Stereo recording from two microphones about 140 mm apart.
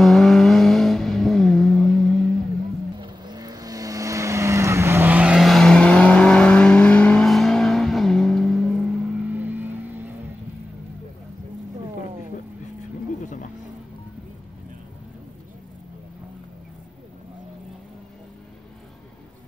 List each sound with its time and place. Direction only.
0.0 s vehicle: centre (ahead or behind)
3.0 s vehicle: 30° right (ahead or behind); by 8.7 s centre (ahead or behind)
9.3 s vehicle: 10° right (ahead or behind)
13.2 s a sound: 65° left (ahead or behind)